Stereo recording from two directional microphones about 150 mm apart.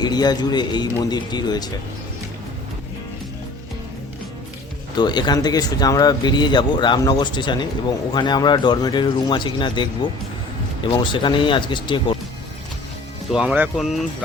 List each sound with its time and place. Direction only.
0.0 s speech: 25° left (ahead or behind)
4.9 s speech: 30° left (ahead or behind)
13.3 s speech: 10° right (ahead or behind)